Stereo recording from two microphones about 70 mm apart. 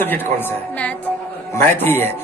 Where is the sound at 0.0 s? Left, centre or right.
Left.